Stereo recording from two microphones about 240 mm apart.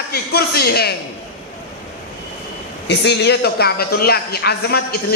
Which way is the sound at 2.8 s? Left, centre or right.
Left.